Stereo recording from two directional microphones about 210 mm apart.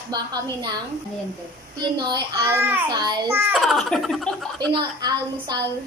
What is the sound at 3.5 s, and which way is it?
Speech, centre (ahead or behind).